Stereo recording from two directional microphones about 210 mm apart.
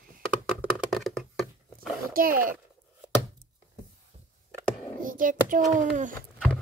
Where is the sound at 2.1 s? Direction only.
40° right (ahead or behind).